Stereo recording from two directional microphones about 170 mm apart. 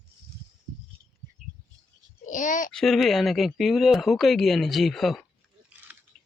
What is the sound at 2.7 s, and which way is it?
Speech, centre (ahead or behind).